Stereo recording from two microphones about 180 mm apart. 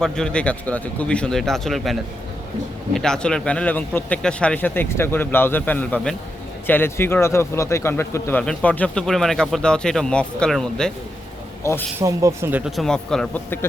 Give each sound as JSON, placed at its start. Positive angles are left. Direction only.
{"t": 0.0, "sound": "a man's voice", "side_deg": 5}
{"t": 11.9, "sound": "a man's voice", "side_deg": -15}